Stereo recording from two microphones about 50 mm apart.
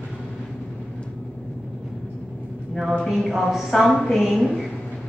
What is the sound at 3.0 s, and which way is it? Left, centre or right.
A woman's voice, centre.